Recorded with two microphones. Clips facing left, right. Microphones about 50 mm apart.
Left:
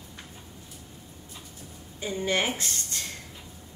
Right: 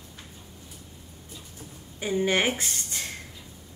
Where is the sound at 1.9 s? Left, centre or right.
Right.